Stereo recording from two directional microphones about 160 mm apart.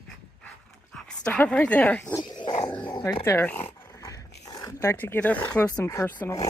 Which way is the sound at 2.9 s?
15° left (ahead or behind).